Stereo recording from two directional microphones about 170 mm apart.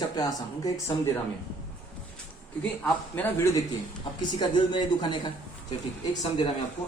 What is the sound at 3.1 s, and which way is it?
Speech, 10° left (ahead or behind).